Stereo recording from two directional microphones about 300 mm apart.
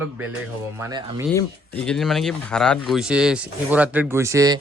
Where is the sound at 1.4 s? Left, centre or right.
Centre.